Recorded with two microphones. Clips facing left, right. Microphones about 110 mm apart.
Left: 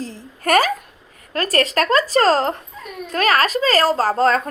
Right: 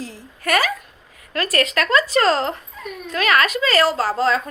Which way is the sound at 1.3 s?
40° left (ahead or behind).